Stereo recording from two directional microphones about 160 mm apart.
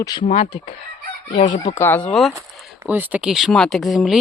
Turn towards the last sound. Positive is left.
turn(degrees=0)  # may be behind; listen again after turning